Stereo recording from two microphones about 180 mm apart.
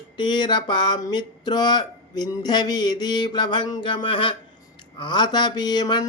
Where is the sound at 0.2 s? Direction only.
25° left (ahead or behind).